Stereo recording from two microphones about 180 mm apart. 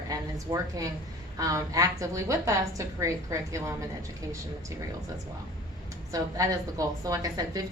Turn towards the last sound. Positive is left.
turn(degrees=-20)  # may be behind; listen again after turning